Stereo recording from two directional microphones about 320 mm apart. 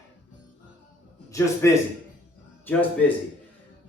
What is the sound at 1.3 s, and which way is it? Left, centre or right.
Speech, centre.